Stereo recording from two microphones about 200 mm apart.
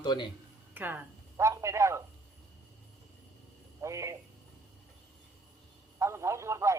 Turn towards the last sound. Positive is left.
turn(degrees=-15)  # may be behind; listen again after turning